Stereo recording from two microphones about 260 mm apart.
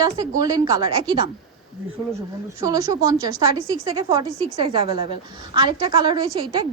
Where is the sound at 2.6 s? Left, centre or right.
Centre.